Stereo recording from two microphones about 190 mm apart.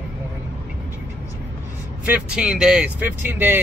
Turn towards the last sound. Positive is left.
turn(degrees=-10)  # may be behind; listen again after turning